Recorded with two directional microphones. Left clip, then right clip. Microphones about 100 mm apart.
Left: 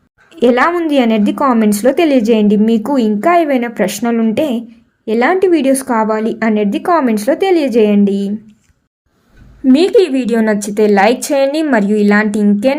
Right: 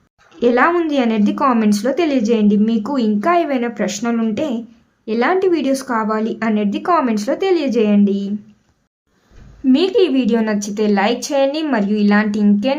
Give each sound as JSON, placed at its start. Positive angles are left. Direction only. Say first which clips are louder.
{"t": 0.3, "sound": "a woman's voice", "louder": "left 3 dB", "side_deg": 40}
{"t": 4.4, "sound": "a woman's voice", "louder": "left 6 dB", "side_deg": 45}
{"t": 9.7, "sound": "a woman's voice", "louder": "left 4 dB", "side_deg": 45}